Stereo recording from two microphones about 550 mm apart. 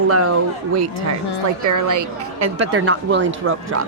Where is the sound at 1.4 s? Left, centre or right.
Right.